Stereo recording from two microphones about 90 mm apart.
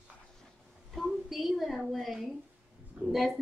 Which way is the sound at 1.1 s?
Centre (ahead or behind).